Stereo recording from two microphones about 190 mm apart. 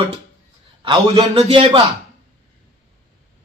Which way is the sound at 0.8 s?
25° right (ahead or behind).